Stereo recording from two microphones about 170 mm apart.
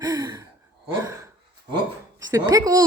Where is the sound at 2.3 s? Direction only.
20° right (ahead or behind).